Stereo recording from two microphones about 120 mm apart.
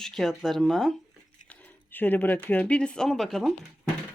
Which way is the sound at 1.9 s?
15° left (ahead or behind).